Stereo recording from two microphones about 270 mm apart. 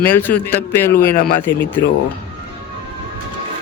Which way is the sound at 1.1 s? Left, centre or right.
Left.